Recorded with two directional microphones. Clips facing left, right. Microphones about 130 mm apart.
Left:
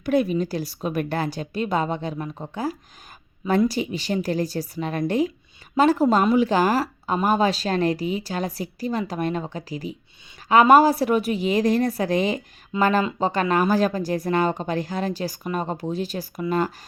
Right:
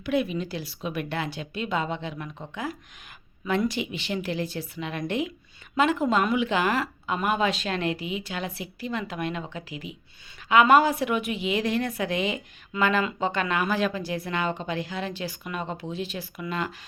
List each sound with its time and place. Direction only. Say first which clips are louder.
0.0 s a woman's voice: left 5 dB; 40° left (ahead or behind)